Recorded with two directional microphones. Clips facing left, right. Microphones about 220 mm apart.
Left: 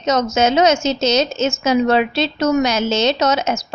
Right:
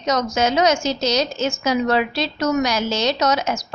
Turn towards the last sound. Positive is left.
turn(degrees=25)  # may be behind; listen again after turning